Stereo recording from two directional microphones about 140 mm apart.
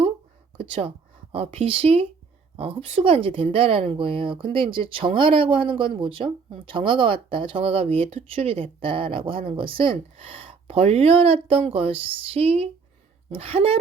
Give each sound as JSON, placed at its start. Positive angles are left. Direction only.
{"t": 0.6, "sound": "speech", "side_deg": -45}